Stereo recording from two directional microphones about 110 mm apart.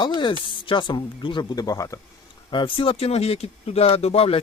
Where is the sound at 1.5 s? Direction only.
35° left (ahead or behind).